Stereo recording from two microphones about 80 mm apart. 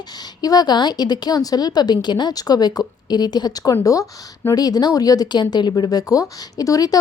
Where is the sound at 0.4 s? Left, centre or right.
Left.